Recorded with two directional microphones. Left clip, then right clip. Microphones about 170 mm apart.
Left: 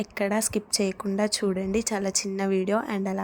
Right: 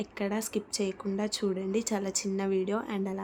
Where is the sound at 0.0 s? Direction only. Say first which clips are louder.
Left 7 dB; 25° left (ahead or behind).